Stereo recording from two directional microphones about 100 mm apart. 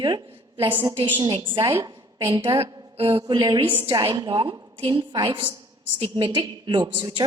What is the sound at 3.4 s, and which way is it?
A woman's voice, 55° right (ahead or behind).